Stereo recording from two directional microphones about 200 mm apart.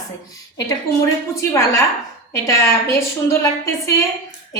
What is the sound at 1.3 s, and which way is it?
A woman's voice, 15° left (ahead or behind).